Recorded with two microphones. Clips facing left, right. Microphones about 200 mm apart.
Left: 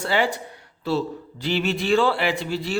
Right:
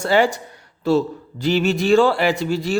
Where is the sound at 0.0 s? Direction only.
45° right (ahead or behind).